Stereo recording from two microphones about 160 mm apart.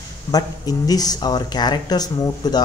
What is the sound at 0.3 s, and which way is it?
Speech, 25° left (ahead or behind).